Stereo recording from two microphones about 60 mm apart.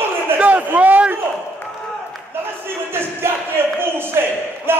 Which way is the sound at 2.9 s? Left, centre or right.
Right.